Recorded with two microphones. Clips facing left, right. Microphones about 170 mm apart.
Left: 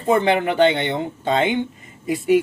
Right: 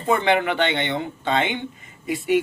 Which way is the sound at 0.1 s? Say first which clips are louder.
Left 2 dB; 35° left (ahead or behind).